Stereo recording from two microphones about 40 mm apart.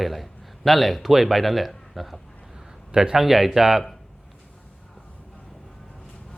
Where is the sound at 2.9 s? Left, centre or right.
Centre.